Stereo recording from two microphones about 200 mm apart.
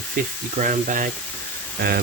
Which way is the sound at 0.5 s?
40° right (ahead or behind).